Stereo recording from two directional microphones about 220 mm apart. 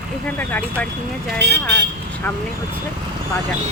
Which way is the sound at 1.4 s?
50° right (ahead or behind).